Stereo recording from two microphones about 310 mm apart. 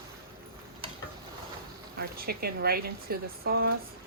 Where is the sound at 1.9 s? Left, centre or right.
Right.